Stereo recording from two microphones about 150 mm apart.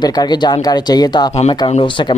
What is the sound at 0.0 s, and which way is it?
Speech, 25° left (ahead or behind).